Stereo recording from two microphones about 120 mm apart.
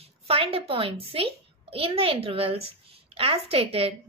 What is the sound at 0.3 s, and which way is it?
A woman's voice, 55° right (ahead or behind).